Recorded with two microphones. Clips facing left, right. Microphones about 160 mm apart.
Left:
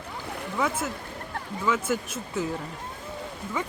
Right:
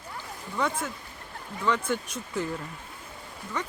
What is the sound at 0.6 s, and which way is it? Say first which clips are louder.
Speech: left 1 dB; 5° left (ahead or behind).